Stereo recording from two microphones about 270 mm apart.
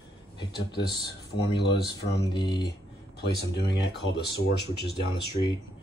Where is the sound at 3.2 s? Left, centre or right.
Left.